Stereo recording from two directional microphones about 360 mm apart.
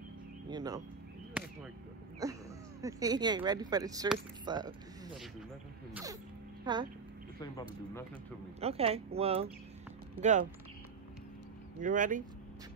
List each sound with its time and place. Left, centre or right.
0.5 s speech: centre
1.4 s a sound: centre
2.8 s speech: centre
6.6 s speech: centre
8.5 s speech: centre
11.8 s speech: right